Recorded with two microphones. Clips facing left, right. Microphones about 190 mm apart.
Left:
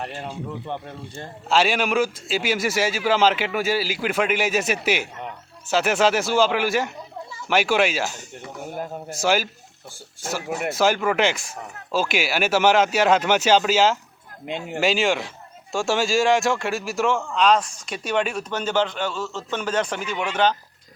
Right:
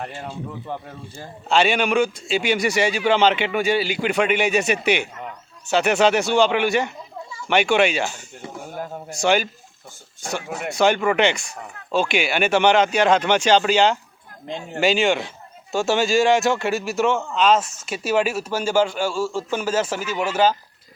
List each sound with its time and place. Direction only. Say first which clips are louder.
0.7 s speech: even; 5° right (ahead or behind)
10.5 s speech: right 2 dB; centre (ahead or behind)